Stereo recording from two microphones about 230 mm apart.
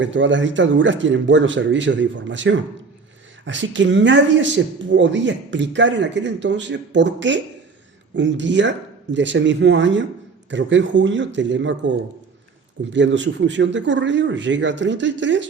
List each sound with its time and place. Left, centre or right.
0.0 s speech: right